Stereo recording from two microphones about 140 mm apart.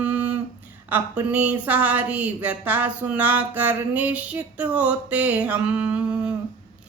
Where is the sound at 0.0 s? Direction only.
10° right (ahead or behind).